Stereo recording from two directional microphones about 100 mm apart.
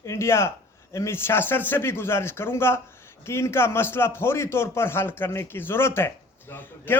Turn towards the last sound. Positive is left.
turn(degrees=20)  # may be behind; listen again after turning